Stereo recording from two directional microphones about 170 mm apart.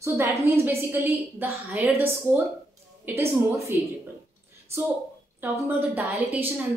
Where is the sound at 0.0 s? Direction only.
15° right (ahead or behind).